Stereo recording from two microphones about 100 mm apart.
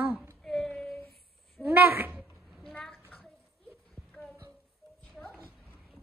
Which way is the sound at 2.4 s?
Centre (ahead or behind).